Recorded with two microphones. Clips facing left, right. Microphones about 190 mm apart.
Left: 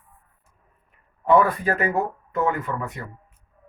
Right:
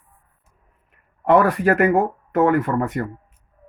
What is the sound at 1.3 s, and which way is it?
Speech, 80° right.